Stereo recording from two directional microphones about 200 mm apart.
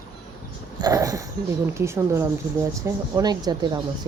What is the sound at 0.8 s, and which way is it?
Speech, 20° right (ahead or behind).